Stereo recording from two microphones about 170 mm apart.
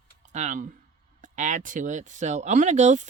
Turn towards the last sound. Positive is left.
turn(degrees=-45)  # may be behind; listen again after turning